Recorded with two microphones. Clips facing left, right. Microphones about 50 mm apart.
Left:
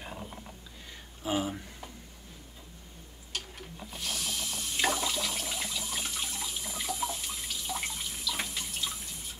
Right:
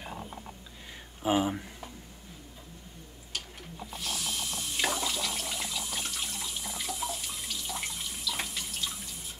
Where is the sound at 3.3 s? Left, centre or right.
Centre.